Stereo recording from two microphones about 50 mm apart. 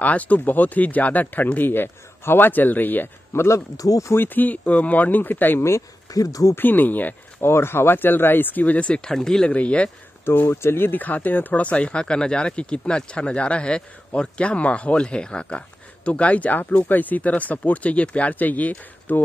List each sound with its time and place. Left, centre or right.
0.0 s speech: left
3.3 s speech: left
4.2 s speech: left
7.3 s speech: left
9.0 s speech: centre
9.5 s speech: left
10.3 s speech: left
10.9 s speech: left